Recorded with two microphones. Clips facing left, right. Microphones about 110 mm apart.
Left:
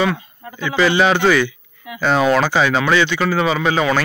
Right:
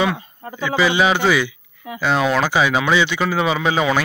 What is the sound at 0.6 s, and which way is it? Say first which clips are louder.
Speech: left 2 dB; 5° right (ahead or behind).